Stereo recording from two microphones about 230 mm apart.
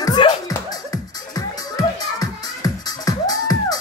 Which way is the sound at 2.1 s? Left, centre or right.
Centre.